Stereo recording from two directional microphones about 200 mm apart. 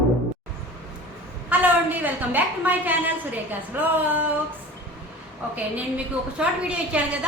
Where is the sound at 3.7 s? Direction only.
10° right (ahead or behind).